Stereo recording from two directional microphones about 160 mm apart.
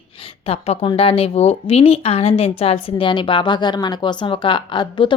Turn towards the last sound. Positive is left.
turn(degrees=30)  # may be behind; listen again after turning